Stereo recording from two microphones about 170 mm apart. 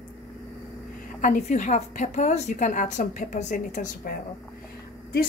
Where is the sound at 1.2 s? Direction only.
50° left (ahead or behind).